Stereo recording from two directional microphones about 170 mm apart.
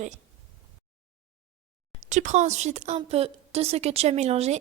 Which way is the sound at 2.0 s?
45° right (ahead or behind).